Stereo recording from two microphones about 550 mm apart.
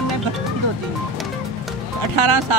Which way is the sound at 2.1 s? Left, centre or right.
Right.